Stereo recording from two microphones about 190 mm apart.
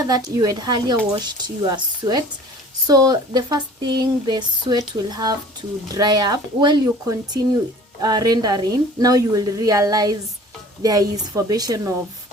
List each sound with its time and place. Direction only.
0.0 s speech: 20° right (ahead or behind)